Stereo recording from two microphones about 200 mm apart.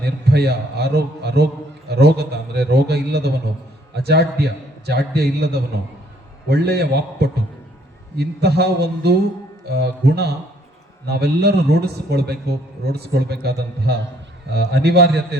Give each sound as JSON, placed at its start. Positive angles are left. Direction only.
{"t": 0.0, "sound": "a man's voice", "side_deg": -55}